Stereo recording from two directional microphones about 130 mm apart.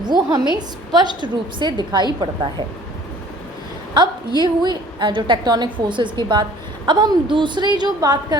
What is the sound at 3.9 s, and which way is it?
A woman's voice, 35° right (ahead or behind).